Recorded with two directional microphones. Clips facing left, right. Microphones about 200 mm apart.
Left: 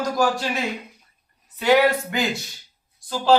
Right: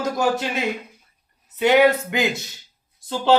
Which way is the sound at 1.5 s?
20° right (ahead or behind).